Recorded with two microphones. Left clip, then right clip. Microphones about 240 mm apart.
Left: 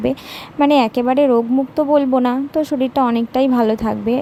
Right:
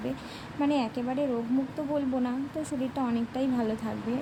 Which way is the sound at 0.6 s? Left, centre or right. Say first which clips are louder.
Left 15 dB; left.